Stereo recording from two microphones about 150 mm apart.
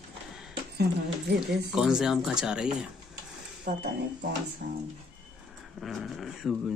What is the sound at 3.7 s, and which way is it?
Speech, 65° right (ahead or behind).